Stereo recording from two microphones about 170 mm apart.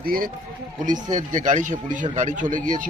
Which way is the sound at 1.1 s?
50° right (ahead or behind).